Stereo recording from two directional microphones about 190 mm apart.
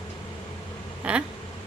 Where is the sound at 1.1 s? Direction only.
5° right (ahead or behind).